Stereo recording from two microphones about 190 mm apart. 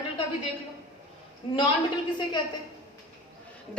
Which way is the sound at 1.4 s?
30° left (ahead or behind).